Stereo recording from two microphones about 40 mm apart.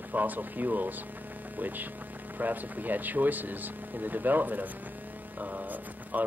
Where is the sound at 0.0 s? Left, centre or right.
Right.